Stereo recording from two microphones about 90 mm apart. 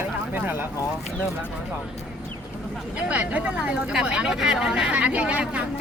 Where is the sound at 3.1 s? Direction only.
15° right (ahead or behind).